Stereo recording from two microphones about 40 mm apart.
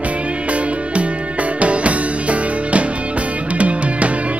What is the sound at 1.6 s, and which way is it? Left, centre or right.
Music, right.